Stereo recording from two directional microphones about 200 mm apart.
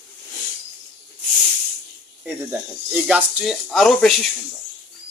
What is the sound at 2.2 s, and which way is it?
Speech, 10° right (ahead or behind).